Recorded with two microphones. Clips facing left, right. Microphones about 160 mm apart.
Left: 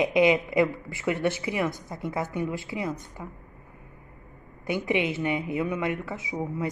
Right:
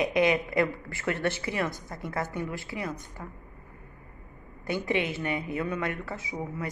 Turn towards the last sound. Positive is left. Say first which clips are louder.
# left 4 dB
turn(degrees=20)  # may be behind; listen again after turning